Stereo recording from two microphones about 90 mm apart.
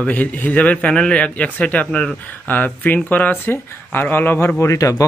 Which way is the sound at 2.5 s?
20° left (ahead or behind).